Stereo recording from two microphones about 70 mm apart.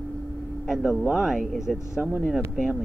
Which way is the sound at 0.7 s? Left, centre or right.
Centre.